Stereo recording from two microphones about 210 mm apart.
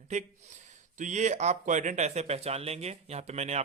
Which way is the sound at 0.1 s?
35° right (ahead or behind).